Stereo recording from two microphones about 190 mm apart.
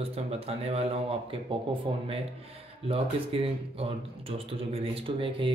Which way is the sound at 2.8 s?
30° right (ahead or behind).